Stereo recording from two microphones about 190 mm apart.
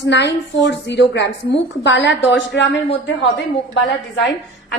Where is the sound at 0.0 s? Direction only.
70° left (ahead or behind).